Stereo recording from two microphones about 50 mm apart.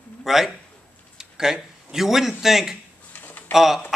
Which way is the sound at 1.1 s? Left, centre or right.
Centre.